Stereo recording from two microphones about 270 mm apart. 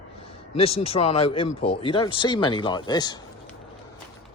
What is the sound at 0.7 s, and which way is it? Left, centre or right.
Speech, left.